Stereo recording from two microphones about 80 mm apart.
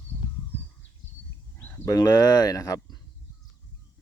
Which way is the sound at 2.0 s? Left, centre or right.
Left.